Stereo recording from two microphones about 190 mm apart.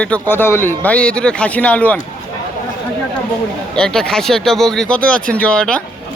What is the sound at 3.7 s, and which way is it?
Speech, 5° left (ahead or behind).